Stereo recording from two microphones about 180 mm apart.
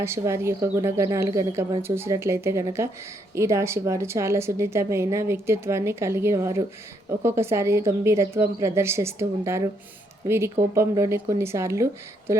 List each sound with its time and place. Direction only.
0.0 s a woman's voice: 15° right (ahead or behind)